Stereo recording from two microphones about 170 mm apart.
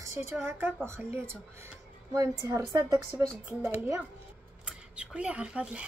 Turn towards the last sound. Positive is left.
turn(degrees=-5)  # may be behind; listen again after turning